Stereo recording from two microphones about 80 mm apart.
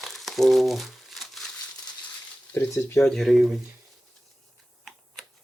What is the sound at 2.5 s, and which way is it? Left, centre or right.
Speech, left.